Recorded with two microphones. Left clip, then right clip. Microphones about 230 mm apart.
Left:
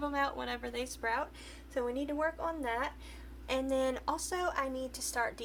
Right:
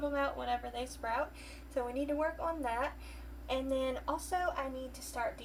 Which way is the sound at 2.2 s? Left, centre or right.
Left.